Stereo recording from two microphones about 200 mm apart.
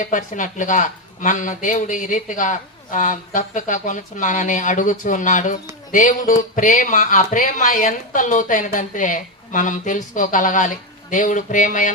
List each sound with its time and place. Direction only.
0.0 s speech: 40° left (ahead or behind)